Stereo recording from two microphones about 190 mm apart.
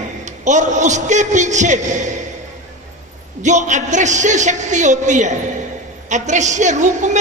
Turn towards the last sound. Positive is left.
turn(degrees=-40)  # may be behind; listen again after turning